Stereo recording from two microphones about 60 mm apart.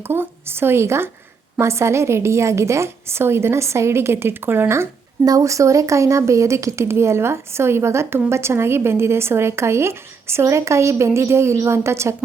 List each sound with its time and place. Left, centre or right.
0.0 s a woman's voice: right
5.2 s speech: right